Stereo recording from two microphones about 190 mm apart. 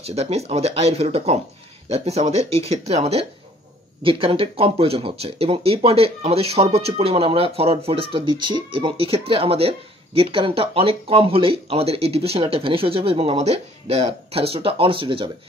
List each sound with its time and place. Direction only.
0.0 s speech: 35° right (ahead or behind)